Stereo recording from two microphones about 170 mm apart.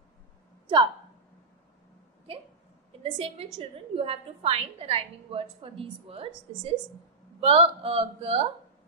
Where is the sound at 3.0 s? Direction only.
35° right (ahead or behind).